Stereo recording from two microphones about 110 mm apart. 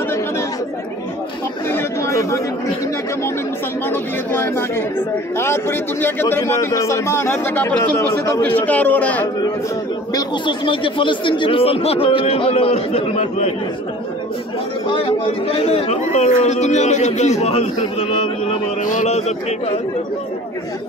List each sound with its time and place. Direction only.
1.7 s chatter: 25° left (ahead or behind)
3.8 s speech: 20° left (ahead or behind)
10.1 s speech: 45° left (ahead or behind); by 13.5 s 75° left (ahead or behind)
14.9 s speech: 55° left (ahead or behind)
19.0 s a sound: 80° left